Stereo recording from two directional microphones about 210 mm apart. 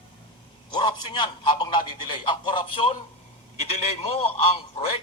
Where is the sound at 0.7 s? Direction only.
20° left (ahead or behind).